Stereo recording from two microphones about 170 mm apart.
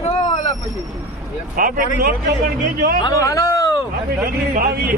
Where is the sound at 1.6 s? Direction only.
55° right (ahead or behind).